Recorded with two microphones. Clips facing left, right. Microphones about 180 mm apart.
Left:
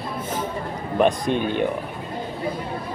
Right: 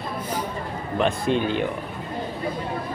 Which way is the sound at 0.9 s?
15° left (ahead or behind).